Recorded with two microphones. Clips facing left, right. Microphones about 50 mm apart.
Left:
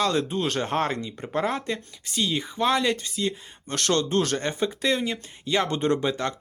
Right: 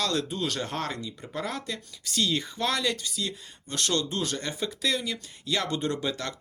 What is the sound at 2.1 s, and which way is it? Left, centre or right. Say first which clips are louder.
Speech: left 1 dB; centre.